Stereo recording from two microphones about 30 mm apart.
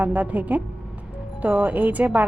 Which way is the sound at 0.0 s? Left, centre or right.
Right.